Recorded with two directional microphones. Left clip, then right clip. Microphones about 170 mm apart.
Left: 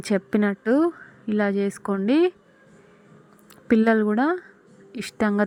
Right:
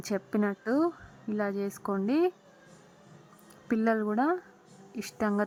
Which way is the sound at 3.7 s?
15° left (ahead or behind).